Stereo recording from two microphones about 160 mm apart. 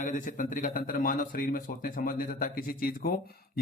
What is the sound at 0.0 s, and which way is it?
A man's voice, 55° left (ahead or behind).